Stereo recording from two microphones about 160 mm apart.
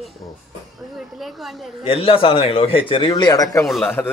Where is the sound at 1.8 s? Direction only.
35° left (ahead or behind).